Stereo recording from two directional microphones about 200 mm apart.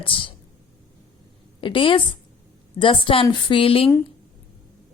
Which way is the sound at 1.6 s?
25° left (ahead or behind).